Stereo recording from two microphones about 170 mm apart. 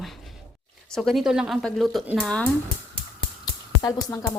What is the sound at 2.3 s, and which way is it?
Speech, 5° left (ahead or behind).